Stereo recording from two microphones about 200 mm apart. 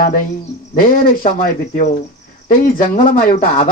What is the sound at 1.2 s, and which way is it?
Speech, 45° left (ahead or behind).